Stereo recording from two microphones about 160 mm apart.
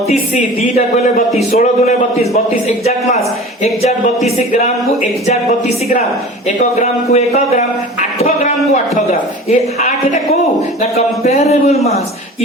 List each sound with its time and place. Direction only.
0.1 s a man's voice: 45° left (ahead or behind)
3.6 s a man's voice: 50° left (ahead or behind)
5.2 s a man's voice: 45° left (ahead or behind)
10.9 s speech: 45° left (ahead or behind)